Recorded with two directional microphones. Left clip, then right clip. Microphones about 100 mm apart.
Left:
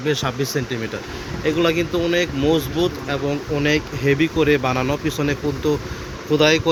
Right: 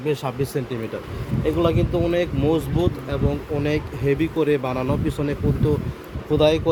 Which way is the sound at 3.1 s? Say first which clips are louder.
Left 3 dB; 5° right (ahead or behind).